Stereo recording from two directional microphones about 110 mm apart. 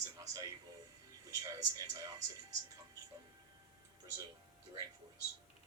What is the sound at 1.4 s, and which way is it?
Speech, 30° right (ahead or behind).